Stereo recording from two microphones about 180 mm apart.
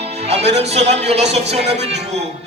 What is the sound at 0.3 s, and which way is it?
Speech, 35° right (ahead or behind).